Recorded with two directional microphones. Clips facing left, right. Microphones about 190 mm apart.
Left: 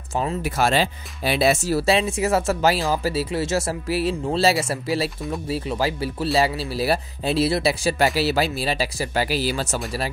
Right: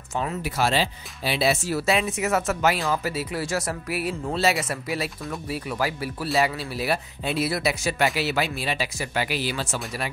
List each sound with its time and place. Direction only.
0.1 s speech: 30° left (ahead or behind)
0.4 s speech: 50° left (ahead or behind)